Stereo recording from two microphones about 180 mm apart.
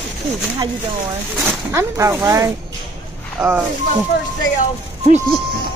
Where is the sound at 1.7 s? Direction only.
15° right (ahead or behind).